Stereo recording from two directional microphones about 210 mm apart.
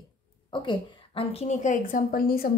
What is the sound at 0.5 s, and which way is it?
A woman's voice, 25° left (ahead or behind).